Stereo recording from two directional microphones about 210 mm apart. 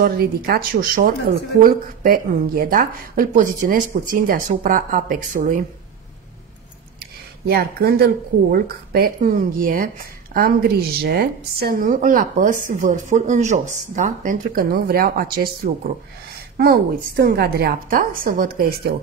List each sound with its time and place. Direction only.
0.0 s a woman's voice: 45° right (ahead or behind)
7.0 s a woman's voice: 50° right (ahead or behind)